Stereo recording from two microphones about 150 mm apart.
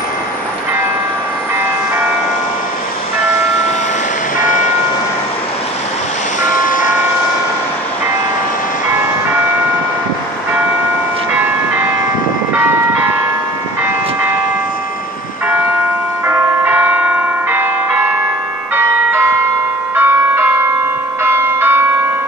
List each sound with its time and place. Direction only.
4.4 s vehicle: 60° left (ahead or behind)
6.4 s vehicle: 60° left (ahead or behind)
16.3 s church bell: 15° right (ahead or behind)
20.0 s change ringing: 15° right (ahead or behind)
21.2 s church bell: 15° right (ahead or behind)